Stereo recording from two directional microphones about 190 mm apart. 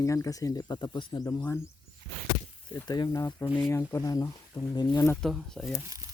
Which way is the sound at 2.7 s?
20° left (ahead or behind).